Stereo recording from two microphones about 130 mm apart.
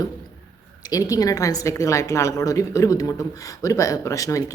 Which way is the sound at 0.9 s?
25° left (ahead or behind).